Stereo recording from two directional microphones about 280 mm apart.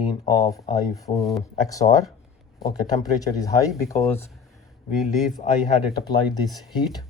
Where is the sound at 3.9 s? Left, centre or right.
Centre.